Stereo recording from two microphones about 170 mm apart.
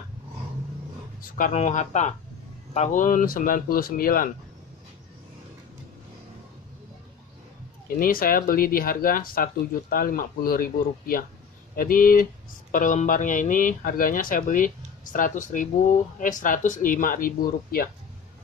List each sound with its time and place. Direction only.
1.2 s speech: 45° left (ahead or behind)
8.0 s speech: 55° left (ahead or behind)